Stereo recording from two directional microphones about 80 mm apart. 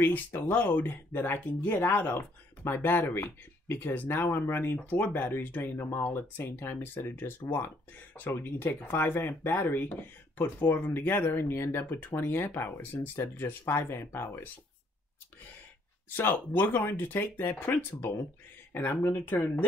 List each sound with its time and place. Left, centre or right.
0.0 s speech: left
16.2 s speech: left